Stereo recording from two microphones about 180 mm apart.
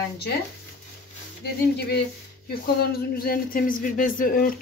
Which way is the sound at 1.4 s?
65° left (ahead or behind).